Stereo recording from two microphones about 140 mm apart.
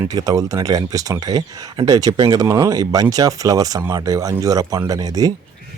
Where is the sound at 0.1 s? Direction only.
25° right (ahead or behind).